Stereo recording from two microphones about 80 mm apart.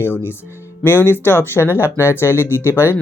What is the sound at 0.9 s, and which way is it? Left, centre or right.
Speech, left.